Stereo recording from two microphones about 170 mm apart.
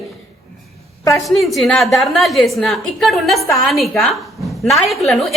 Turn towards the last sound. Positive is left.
turn(degrees=0)  # may be behind; listen again after turning